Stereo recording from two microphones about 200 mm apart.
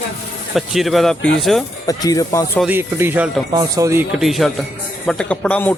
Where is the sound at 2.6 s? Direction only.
10° right (ahead or behind).